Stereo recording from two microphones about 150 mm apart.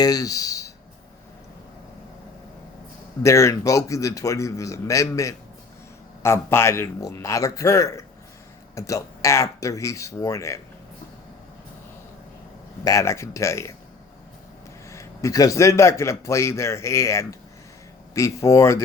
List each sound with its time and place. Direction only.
0.0 s a man's voice: 25° left (ahead or behind)
3.2 s a man's voice: 20° left (ahead or behind)
12.8 s a man's voice: 20° left (ahead or behind)
14.8 s a man's voice: 20° left (ahead or behind)